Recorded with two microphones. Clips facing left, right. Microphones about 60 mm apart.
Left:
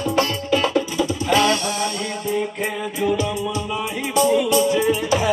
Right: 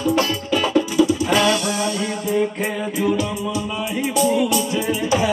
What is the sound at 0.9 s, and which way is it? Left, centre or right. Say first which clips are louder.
Music: right 2 dB; centre.